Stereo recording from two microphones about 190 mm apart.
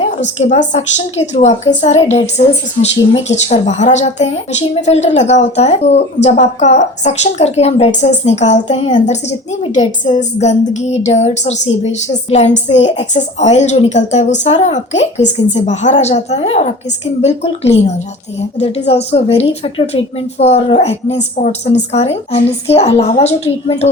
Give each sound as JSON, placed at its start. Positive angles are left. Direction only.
{"t": 0.0, "sound": "speech", "side_deg": 40}
{"t": 10.2, "sound": "speech", "side_deg": 35}